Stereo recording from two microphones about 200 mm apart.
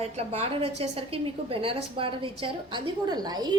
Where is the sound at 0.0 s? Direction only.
30° right (ahead or behind).